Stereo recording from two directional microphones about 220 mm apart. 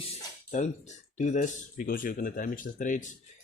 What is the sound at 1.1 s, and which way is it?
Speech, 35° left (ahead or behind).